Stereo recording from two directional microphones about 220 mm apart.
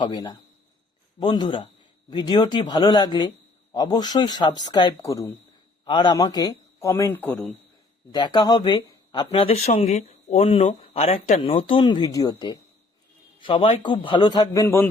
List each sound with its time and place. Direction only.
0.0 s a man's voice: 20° left (ahead or behind); by 7.5 s 5° left (ahead or behind)
8.1 s speech: 20° left (ahead or behind)